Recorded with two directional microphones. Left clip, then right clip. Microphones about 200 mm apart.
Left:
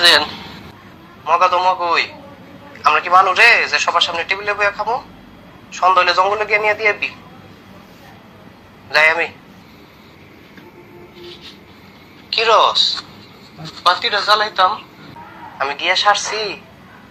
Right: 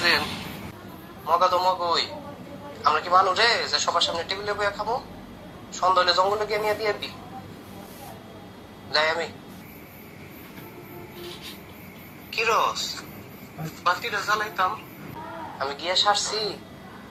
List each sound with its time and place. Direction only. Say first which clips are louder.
0.0 s a man's voice: left 11 dB; 35° left (ahead or behind)
1.3 s a man's voice: left 7 dB; 20° left (ahead or behind)
8.9 s a man's voice: left 10 dB; 25° left (ahead or behind)
12.4 s a man's voice: left 11 dB; 35° left (ahead or behind)
15.5 s a man's voice: left 8 dB; 25° left (ahead or behind)